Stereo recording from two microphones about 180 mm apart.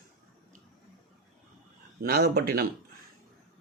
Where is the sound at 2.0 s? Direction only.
55° right (ahead or behind).